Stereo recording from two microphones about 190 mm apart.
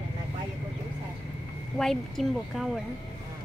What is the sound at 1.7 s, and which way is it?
Speech, centre (ahead or behind).